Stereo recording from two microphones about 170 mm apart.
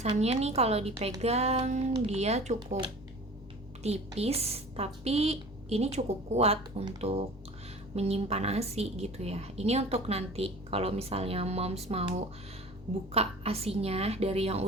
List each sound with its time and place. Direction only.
0.2 s a woman's voice: 40° right (ahead or behind)
3.8 s a woman's voice: 40° right (ahead or behind)
13.1 s a woman's voice: 35° right (ahead or behind)